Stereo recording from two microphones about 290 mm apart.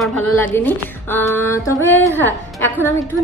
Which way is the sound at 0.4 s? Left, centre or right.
Centre.